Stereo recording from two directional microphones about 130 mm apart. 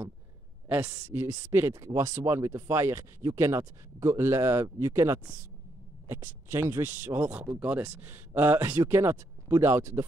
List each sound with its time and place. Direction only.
0.7 s speech: 20° right (ahead or behind)
6.5 s speech: 20° right (ahead or behind)